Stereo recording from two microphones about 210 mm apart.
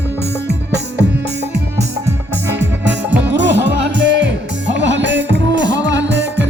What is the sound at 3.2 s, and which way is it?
Music, 55° right (ahead or behind).